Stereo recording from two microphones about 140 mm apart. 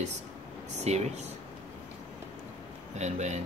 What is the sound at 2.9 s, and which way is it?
Speech, 55° right (ahead or behind).